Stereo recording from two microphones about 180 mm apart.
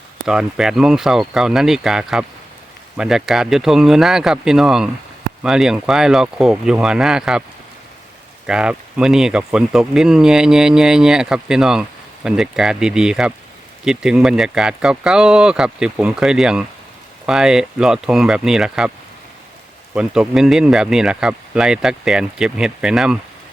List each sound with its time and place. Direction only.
0.3 s speech: 5° right (ahead or behind)
8.4 s speech: 5° right (ahead or behind)
19.9 s speech: 5° right (ahead or behind)